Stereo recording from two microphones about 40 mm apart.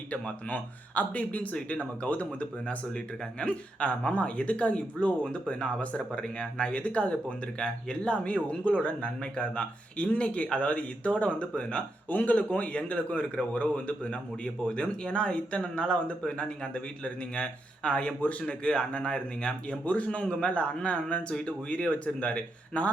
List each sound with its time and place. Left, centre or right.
0.4 s a man's voice: left
12.0 s a man's voice: left